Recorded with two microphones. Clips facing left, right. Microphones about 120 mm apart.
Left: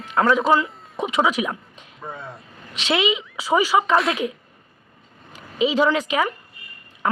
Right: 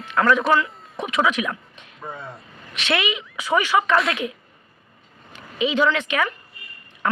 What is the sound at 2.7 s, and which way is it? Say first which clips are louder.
Speech: left 2 dB; 30° left (ahead or behind).